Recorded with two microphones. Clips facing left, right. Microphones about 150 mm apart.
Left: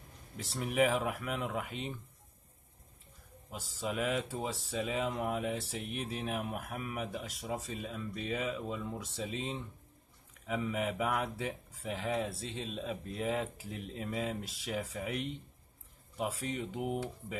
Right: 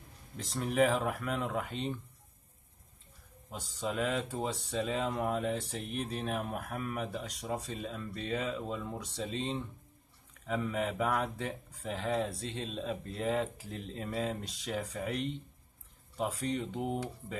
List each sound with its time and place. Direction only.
0.6 s speech: 5° left (ahead or behind)
3.5 s speech: 5° left (ahead or behind)
5.6 s speech: 35° right (ahead or behind)
5.9 s speech: 5° left (ahead or behind)